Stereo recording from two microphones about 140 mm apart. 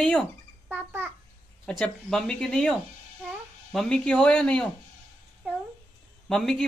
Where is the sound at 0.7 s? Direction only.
15° right (ahead or behind).